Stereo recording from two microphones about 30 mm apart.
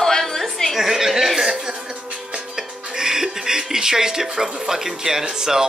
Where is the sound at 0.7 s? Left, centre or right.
Centre.